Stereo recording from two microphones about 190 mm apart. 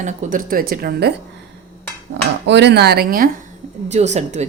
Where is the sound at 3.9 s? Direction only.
35° right (ahead or behind).